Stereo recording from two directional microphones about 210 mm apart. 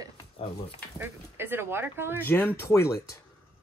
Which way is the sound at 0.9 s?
10° right (ahead or behind).